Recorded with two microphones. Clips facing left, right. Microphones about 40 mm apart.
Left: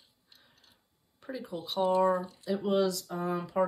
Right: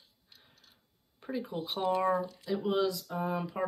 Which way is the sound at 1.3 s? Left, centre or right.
Centre.